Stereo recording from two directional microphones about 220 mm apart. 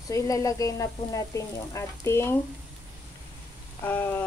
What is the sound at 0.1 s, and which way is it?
Speech, 15° left (ahead or behind).